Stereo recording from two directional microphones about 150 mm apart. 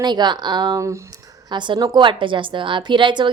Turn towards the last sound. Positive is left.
turn(degrees=-30)  # may be behind; listen again after turning